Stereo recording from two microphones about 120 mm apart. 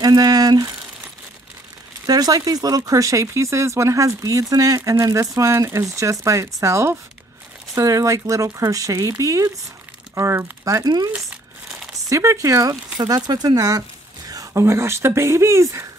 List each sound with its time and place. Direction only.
0.0 s speech: 35° right (ahead or behind)
2.0 s speech: 30° right (ahead or behind)
12.1 s speech: 25° right (ahead or behind)